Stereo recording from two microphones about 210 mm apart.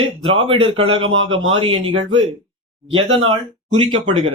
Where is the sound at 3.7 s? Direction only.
25° right (ahead or behind).